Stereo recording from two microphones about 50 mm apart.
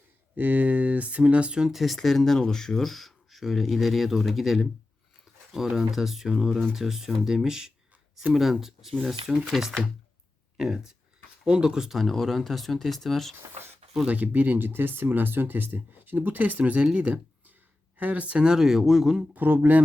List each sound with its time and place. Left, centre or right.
0.3 s speech: right
1.6 s speech: centre
5.7 s speech: centre
11.4 s speech: centre
11.9 s speech: centre
14.1 s speech: right
16.8 s speech: centre
17.9 s speech: right; by 19.2 s centre
19.3 s speech: right